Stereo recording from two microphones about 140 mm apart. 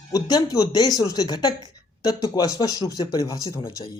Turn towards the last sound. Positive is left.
turn(degrees=25)  # may be behind; listen again after turning